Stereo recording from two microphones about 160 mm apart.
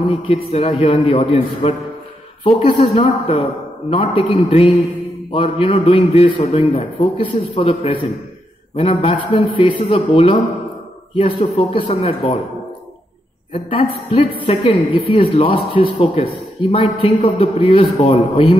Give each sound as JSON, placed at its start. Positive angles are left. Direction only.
{"t": 0.1, "sound": "speech", "side_deg": 35}
{"t": 13.5, "sound": "speech", "side_deg": 35}